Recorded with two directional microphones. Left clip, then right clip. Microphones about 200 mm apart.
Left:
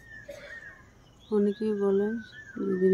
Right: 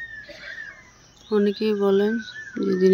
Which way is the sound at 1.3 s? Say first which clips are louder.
Right 6 dB; 15° right (ahead or behind).